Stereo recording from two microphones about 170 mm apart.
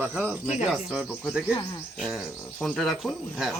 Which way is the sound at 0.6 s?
5° right (ahead or behind).